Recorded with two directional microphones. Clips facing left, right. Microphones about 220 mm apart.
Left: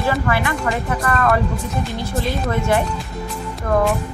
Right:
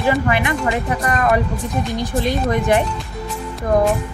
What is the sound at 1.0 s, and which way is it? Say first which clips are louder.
Speech: even; 15° right (ahead or behind).